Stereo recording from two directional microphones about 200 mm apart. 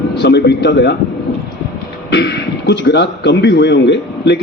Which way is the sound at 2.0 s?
60° left (ahead or behind).